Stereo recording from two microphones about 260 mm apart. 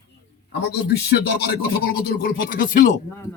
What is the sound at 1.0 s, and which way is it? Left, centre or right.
Speech, left.